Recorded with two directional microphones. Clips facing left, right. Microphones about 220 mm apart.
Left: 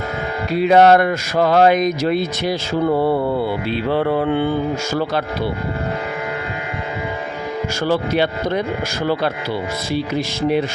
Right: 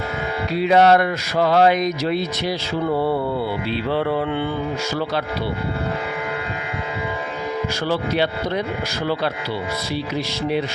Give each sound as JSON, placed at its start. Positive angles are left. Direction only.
{"t": 0.5, "sound": "speech", "side_deg": 50}
{"t": 3.7, "sound": "speech", "side_deg": 50}
{"t": 7.9, "sound": "speech", "side_deg": 50}
{"t": 9.9, "sound": "speech", "side_deg": 50}